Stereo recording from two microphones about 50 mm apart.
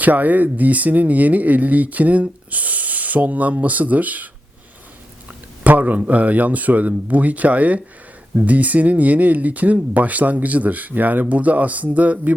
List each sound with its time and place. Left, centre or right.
0.0 s speech: right
5.6 s speech: right